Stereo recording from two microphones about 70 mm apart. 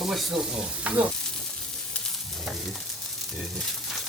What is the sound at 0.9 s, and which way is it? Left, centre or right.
Frying, centre.